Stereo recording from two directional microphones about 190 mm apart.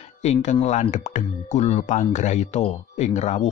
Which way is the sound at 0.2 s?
35° left (ahead or behind).